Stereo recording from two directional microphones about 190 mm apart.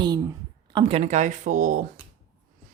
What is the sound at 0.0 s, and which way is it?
A woman's voice, 20° right (ahead or behind).